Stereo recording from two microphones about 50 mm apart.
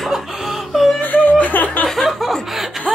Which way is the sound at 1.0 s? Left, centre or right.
Left.